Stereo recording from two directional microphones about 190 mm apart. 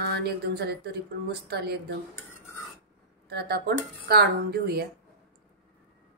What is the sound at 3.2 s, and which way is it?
Speech, 55° right (ahead or behind).